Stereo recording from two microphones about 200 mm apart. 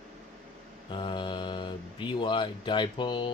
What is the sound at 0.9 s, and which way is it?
Speech, 25° left (ahead or behind).